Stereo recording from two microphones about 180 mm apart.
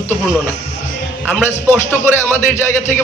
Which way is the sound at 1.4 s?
10° left (ahead or behind).